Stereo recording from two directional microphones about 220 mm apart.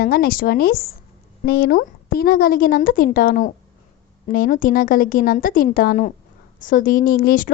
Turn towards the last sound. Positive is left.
turn(degrees=40)  # may be behind; listen again after turning